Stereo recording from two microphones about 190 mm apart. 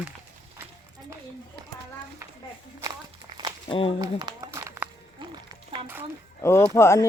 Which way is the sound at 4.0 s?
20° right (ahead or behind).